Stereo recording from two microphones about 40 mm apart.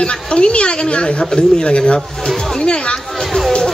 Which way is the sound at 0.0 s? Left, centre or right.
Left.